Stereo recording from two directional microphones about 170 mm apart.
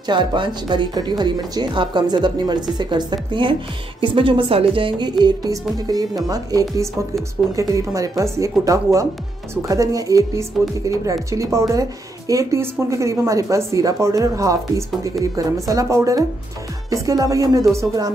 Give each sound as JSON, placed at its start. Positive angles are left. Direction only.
{"t": 0.1, "sound": "speech", "side_deg": -25}
{"t": 12.3, "sound": "speech", "side_deg": -20}